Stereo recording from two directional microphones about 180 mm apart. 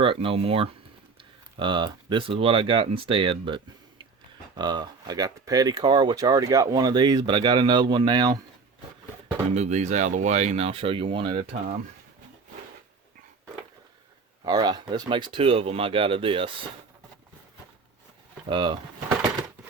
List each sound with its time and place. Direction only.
0.0 s speech: 30° right (ahead or behind)
9.6 s speech: 40° right (ahead or behind)
14.4 s speech: 25° right (ahead or behind)
18.4 s speech: 25° right (ahead or behind)